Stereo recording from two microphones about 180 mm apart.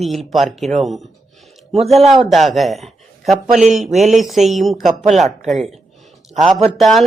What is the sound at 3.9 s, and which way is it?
Speech, 40° right (ahead or behind).